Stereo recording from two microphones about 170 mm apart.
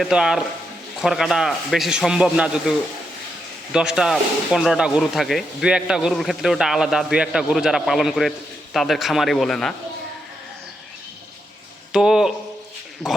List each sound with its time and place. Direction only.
0.0 s speech: 5° right (ahead or behind)
11.9 s speech: 5° right (ahead or behind)